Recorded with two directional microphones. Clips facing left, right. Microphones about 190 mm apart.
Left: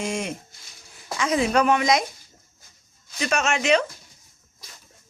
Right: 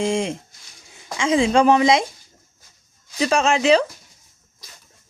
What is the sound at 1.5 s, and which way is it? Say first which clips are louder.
Speech: right 5 dB; 30° right (ahead or behind).